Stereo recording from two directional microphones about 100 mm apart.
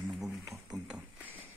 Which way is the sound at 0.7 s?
45° right (ahead or behind).